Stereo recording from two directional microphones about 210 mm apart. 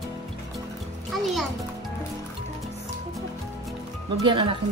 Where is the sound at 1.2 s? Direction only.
Centre (ahead or behind).